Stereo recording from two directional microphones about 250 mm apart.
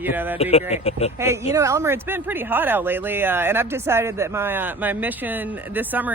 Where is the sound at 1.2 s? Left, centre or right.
Centre.